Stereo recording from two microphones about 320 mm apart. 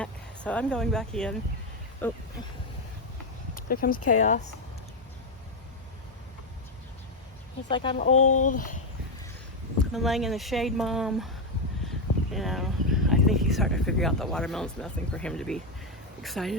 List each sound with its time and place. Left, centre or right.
0.0 s speech: centre
3.5 s speech: left
7.7 s speech: centre
8.1 s speech: left
8.4 s speech: left
9.9 s speech: centre